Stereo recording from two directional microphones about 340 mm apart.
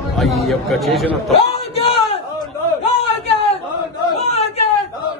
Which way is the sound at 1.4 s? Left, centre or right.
Centre.